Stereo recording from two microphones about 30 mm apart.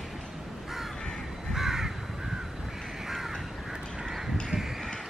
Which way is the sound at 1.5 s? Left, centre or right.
Centre.